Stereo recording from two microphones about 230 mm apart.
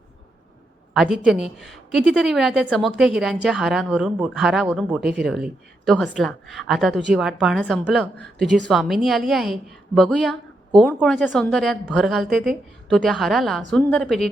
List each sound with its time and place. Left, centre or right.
0.9 s a woman's voice: centre